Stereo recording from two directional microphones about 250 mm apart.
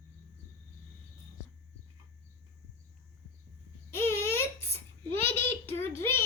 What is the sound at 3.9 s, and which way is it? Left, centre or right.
Babbling, centre.